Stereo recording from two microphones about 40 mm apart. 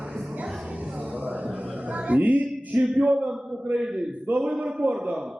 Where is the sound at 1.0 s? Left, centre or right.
Right.